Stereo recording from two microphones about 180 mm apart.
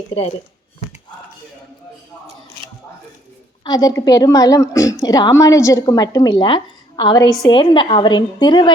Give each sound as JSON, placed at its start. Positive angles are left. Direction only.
{"t": 0.1, "sound": "speech", "side_deg": 35}
{"t": 3.6, "sound": "a woman's voice", "side_deg": 20}